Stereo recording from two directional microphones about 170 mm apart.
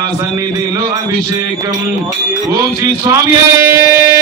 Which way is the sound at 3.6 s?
15° right (ahead or behind).